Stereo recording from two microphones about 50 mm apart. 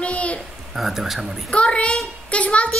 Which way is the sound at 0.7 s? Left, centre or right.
Centre.